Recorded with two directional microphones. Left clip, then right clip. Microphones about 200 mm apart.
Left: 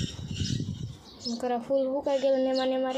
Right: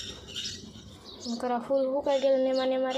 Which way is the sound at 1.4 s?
15° left (ahead or behind).